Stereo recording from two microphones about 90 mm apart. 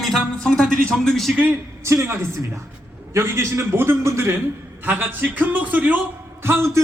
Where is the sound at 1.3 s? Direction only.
15° right (ahead or behind).